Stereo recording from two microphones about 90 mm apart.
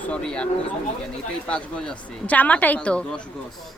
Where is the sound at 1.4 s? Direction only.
15° left (ahead or behind).